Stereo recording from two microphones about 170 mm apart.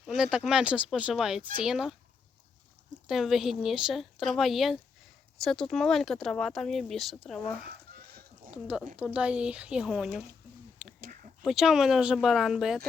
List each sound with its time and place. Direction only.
0.2 s speech: 5° right (ahead or behind)
3.1 s speech: centre (ahead or behind)
7.9 s chicken: 65° right (ahead or behind)
8.4 s speech: 5° right (ahead or behind)
11.0 s a sound: 55° right (ahead or behind)
11.4 s speech: centre (ahead or behind)